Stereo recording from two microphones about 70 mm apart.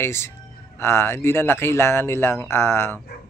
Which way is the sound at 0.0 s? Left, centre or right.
Left.